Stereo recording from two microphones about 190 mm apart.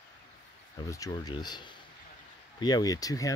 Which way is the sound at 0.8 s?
20° left (ahead or behind).